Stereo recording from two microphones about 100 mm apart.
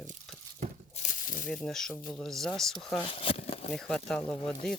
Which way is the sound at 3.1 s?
70° left (ahead or behind).